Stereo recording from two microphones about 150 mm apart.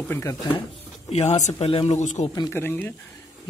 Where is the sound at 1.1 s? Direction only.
45° left (ahead or behind).